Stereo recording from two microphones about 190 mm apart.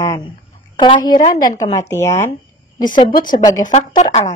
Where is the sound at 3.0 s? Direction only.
25° left (ahead or behind).